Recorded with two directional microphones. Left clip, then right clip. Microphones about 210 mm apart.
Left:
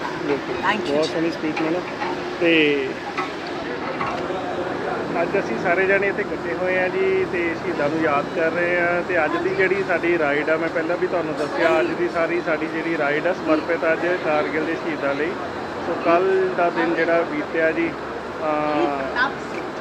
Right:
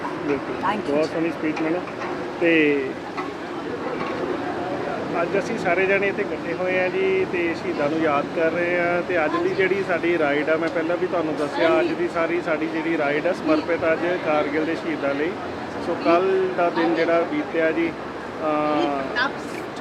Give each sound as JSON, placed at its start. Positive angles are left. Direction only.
{"t": 2.4, "sound": "speech", "side_deg": 5}
{"t": 5.4, "sound": "speech", "side_deg": -20}
{"t": 11.7, "sound": "speech", "side_deg": -15}
{"t": 16.0, "sound": "speech", "side_deg": -15}